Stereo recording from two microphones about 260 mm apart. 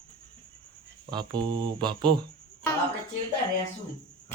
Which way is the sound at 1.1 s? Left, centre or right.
Centre.